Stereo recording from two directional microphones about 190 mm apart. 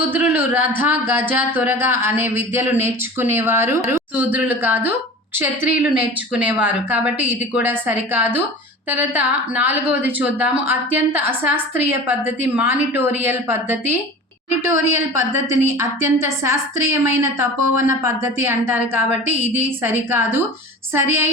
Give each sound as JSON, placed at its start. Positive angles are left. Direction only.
{"t": 0.1, "sound": "a woman's voice", "side_deg": -10}
{"t": 15.4, "sound": "a woman's voice", "side_deg": -15}